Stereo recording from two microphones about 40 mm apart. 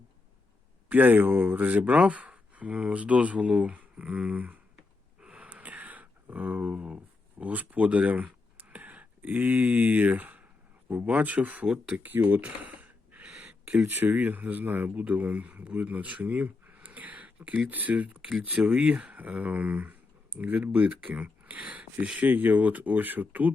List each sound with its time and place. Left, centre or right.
0.9 s speech: right
5.2 s a sound: right
6.7 s speech: right
11.9 s speech: right
12.4 s speech: right
13.2 s a sound: right
13.8 s speech: right
18.2 s speech: centre
18.4 s speech: right
22.2 s speech: right